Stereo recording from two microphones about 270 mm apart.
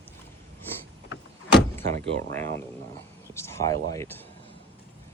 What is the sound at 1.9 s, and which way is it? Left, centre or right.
Speech, right.